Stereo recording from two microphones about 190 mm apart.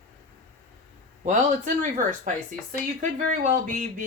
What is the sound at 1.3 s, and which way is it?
Speech, 40° right (ahead or behind).